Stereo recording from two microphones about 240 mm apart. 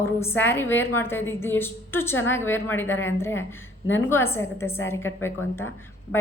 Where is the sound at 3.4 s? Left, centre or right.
Left.